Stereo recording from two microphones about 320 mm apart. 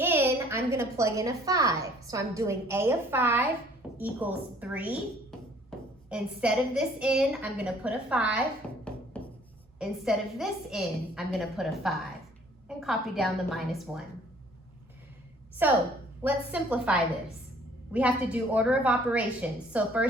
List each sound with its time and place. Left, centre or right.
0.0 s a woman's voice: centre
5.3 s a sound: centre
6.1 s a woman's voice: centre
9.7 s a woman's voice: centre
15.6 s a woman's voice: centre